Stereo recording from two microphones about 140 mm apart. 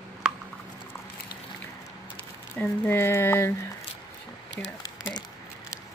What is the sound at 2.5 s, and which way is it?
Speech, 15° left (ahead or behind).